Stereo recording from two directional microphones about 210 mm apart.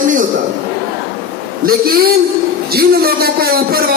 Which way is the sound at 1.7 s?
45° right (ahead or behind).